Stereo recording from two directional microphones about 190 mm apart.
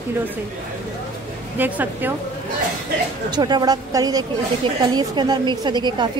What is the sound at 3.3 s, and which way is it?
A woman's voice, 20° right (ahead or behind).